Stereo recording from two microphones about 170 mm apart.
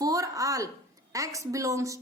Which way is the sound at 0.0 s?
20° right (ahead or behind).